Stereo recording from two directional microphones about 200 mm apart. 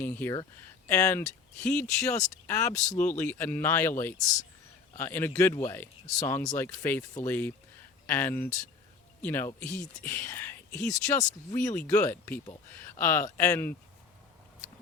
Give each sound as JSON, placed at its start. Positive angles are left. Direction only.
{"t": 0.0, "sound": "speech", "side_deg": 10}